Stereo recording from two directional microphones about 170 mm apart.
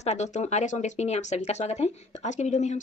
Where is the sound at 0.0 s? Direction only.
40° left (ahead or behind).